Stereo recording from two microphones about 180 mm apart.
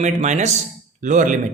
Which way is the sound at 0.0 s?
40° right (ahead or behind).